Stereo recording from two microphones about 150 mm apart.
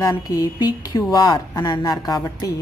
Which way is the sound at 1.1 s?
25° left (ahead or behind).